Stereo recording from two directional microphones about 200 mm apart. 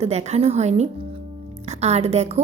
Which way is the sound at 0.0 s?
35° right (ahead or behind).